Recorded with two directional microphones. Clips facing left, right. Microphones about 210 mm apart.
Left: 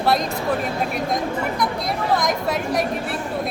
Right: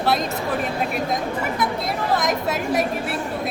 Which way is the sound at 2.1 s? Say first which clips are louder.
Left 1 dB; centre (ahead or behind).